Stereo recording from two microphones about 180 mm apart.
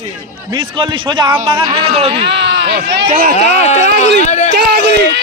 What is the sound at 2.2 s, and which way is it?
Speech, 70° right (ahead or behind).